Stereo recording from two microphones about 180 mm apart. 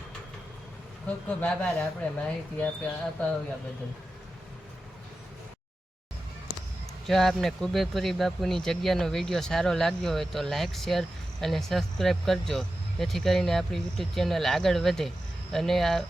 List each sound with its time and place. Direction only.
1.0 s speech: 10° left (ahead or behind)
7.1 s speech: centre (ahead or behind)